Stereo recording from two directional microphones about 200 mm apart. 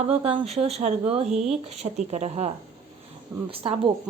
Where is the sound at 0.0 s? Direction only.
30° right (ahead or behind).